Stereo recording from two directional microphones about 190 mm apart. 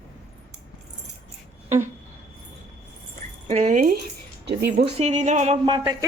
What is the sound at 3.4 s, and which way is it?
Speech, 40° right (ahead or behind).